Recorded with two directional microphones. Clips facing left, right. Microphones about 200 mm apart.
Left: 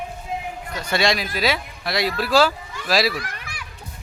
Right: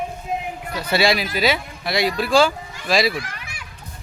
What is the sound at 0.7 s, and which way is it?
Speech, 5° right (ahead or behind).